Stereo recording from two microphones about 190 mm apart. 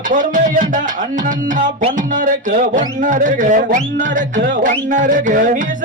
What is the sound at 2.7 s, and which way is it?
Speech, 45° right (ahead or behind).